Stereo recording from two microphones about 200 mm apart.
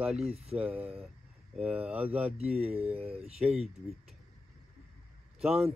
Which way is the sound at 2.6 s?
30° right (ahead or behind).